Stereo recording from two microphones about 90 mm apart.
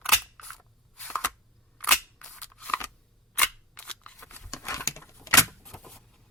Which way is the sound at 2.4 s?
15° left (ahead or behind).